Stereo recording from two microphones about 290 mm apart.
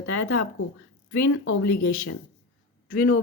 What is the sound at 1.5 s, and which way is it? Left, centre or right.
Speech, left.